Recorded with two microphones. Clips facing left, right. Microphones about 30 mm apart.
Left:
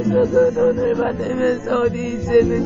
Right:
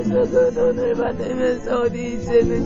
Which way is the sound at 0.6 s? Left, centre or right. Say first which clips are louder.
Left 2 dB; left.